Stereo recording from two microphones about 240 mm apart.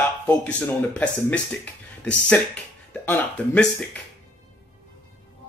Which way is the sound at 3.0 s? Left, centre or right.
Centre.